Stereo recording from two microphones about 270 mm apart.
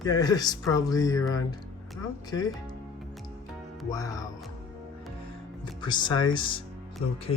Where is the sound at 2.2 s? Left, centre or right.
Centre.